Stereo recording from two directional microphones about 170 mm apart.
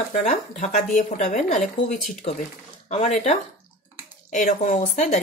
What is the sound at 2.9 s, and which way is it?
Speech, 40° left (ahead or behind).